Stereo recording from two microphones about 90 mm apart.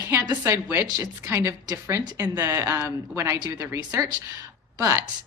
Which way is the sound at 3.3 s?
50° right (ahead or behind).